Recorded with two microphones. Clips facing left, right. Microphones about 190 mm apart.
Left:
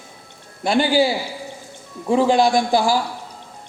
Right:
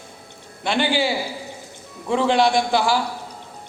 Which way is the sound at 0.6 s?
40° left (ahead or behind).